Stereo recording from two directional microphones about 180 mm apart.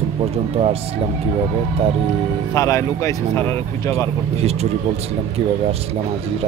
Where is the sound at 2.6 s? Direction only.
15° left (ahead or behind).